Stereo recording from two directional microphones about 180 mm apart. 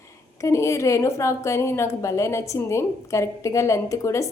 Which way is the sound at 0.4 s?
15° left (ahead or behind).